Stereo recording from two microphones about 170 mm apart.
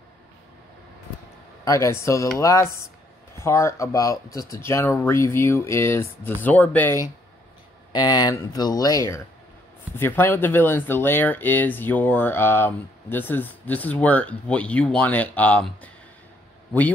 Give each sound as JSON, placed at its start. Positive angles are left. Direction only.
{"t": 1.6, "sound": "speech", "side_deg": 20}